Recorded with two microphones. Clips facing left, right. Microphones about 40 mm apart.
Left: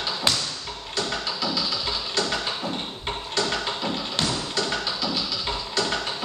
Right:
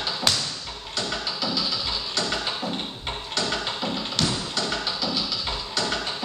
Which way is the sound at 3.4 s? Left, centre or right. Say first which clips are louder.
Left 1 dB; centre.